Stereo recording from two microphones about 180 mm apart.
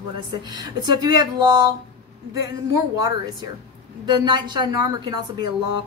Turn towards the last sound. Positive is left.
turn(degrees=-25)  # may be behind; listen again after turning